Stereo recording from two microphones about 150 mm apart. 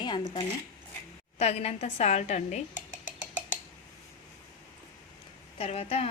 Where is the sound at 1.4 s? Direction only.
45° left (ahead or behind).